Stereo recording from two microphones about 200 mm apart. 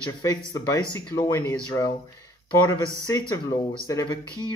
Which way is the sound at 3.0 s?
20° left (ahead or behind).